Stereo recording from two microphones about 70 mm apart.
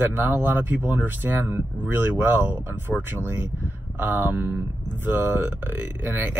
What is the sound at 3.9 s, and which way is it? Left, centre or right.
Speech, right.